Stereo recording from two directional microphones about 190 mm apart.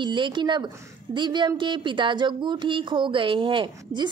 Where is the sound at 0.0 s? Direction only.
25° right (ahead or behind).